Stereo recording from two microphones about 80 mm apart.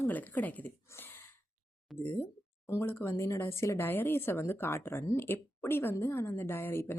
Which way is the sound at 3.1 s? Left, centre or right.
Left.